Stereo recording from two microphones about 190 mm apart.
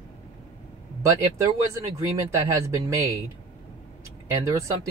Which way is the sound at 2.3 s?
15° right (ahead or behind).